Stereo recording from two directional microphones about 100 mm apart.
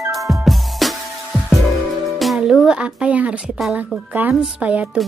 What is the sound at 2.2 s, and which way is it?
Speech, centre (ahead or behind).